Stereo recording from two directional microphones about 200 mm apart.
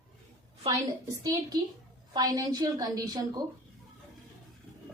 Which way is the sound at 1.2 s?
15° right (ahead or behind).